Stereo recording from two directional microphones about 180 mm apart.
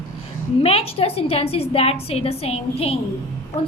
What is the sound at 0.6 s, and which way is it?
A woman's voice, 35° left (ahead or behind).